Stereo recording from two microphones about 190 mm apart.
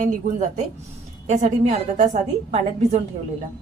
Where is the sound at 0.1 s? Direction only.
35° right (ahead or behind).